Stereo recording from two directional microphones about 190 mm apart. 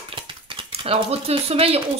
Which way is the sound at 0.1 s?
25° right (ahead or behind).